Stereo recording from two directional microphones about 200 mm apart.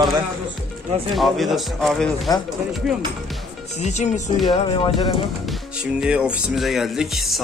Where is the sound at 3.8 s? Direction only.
35° left (ahead or behind).